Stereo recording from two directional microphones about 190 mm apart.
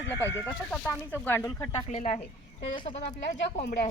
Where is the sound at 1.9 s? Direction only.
40° left (ahead or behind).